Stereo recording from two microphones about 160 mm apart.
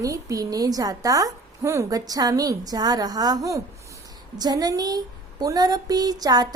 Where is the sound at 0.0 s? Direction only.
20° right (ahead or behind).